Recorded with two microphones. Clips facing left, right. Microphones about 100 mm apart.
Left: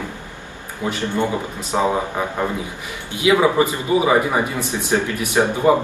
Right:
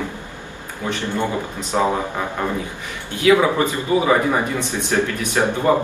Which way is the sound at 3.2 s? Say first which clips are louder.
Even; 15° left (ahead or behind).